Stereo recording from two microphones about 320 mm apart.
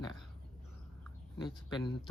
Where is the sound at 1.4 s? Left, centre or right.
Centre.